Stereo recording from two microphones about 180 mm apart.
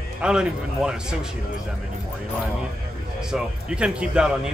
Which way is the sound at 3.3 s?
5° right (ahead or behind).